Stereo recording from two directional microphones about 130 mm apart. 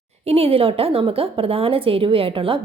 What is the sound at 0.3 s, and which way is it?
A woman's voice, 50° right (ahead or behind).